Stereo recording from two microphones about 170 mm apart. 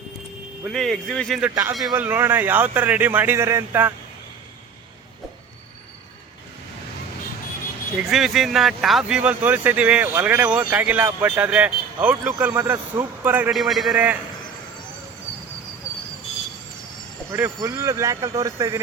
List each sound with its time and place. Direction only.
0.6 s a man's voice: centre (ahead or behind)
1.5 s speech: 10° right (ahead or behind)
7.9 s speech: centre (ahead or behind)
17.3 s speech: 15° right (ahead or behind)